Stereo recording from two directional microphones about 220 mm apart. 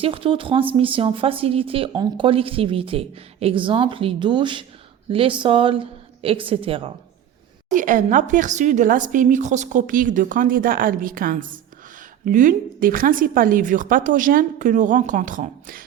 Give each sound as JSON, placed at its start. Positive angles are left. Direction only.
{"t": 0.0, "sound": "speech", "side_deg": -25}
{"t": 7.7, "sound": "a woman's voice", "side_deg": -35}